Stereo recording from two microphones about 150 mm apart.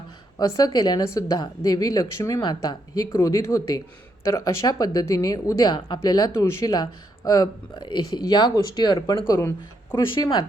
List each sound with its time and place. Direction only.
0.3 s a woman's voice: 25° left (ahead or behind)
9.2 s a woman's voice: 20° left (ahead or behind)